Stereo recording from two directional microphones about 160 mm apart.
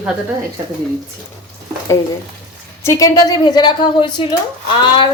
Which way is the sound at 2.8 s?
20° left (ahead or behind).